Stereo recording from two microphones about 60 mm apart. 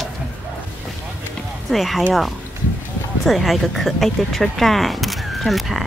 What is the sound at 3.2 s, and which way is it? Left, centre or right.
Speech, centre.